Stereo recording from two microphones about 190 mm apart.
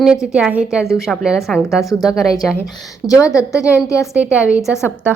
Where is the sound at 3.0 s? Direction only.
15° left (ahead or behind).